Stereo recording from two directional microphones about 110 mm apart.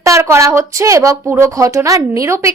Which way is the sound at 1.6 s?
30° right (ahead or behind).